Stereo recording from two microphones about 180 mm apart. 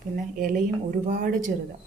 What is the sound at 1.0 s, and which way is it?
Speech, 45° right (ahead or behind).